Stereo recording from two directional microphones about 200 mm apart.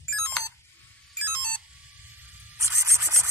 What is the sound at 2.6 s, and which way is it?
Rub, 15° right (ahead or behind).